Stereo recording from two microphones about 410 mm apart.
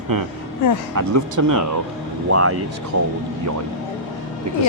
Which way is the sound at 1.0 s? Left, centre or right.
Right.